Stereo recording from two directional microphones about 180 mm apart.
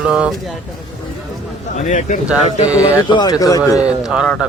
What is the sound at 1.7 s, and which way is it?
Speech, 40° left (ahead or behind).